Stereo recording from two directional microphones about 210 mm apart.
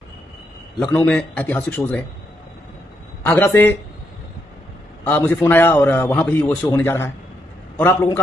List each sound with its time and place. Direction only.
0.9 s a man's voice: 10° left (ahead or behind)
3.3 s a man's voice: 10° left (ahead or behind)
5.0 s a man's voice: 10° left (ahead or behind)